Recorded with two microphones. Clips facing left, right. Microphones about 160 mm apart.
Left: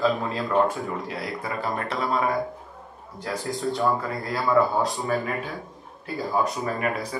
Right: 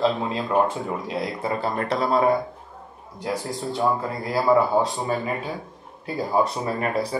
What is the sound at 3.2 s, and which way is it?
Speech, 20° right (ahead or behind).